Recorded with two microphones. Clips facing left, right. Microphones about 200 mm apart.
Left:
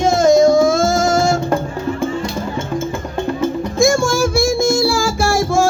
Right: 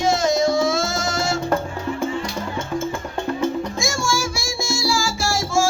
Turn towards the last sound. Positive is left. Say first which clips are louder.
# left 6 dB
turn(degrees=60)  # may be behind; listen again after turning